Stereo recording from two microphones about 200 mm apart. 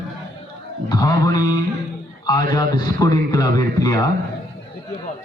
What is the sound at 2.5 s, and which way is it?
A man's voice, 20° left (ahead or behind).